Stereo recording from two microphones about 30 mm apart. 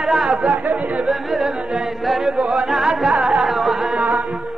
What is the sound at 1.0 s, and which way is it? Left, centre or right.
Music, centre.